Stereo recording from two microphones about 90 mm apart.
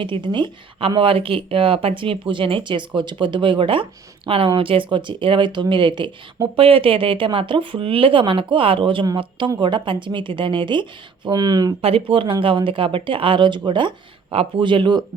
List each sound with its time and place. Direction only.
0.0 s speech: 60° right (ahead or behind)
4.3 s speech: 85° right; by 6.1 s 60° right (ahead or behind)
6.6 s speech: 90° right; by 9.0 s 70° right (ahead or behind)
9.6 s speech: 60° right (ahead or behind)
11.8 s speech: 90° right; by 15.0 s 60° right (ahead or behind)